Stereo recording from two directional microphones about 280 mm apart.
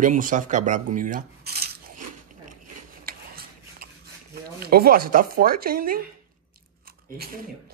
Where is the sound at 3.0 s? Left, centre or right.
Right.